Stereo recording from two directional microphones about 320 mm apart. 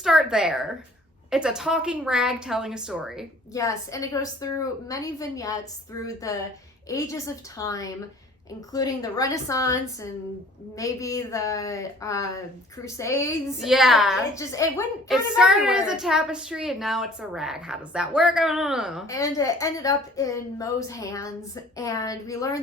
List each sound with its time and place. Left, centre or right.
0.0 s a woman's voice: centre
3.5 s a woman's voice: centre
13.6 s a woman's voice: centre
15.4 s a woman's voice: centre
19.0 s a woman's voice: centre